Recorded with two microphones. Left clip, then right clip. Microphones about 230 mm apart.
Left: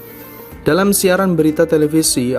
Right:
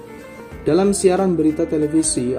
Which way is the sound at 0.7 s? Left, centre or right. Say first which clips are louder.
Left 2 dB; left.